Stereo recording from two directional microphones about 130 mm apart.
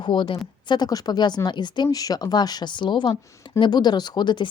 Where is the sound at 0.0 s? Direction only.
40° left (ahead or behind).